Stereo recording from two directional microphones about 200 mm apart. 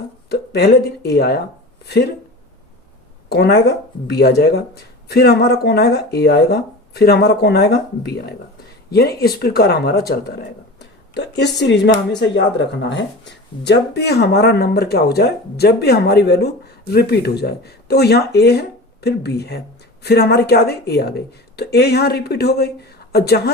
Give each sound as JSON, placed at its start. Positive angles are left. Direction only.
{"t": 0.3, "sound": "speech", "side_deg": 55}
{"t": 3.2, "sound": "speech", "side_deg": 55}